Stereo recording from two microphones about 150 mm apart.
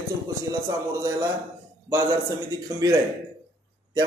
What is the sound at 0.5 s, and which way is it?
Speech, 20° right (ahead or behind).